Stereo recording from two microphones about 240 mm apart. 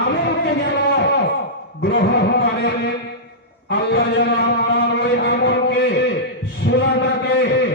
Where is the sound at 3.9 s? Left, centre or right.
Left.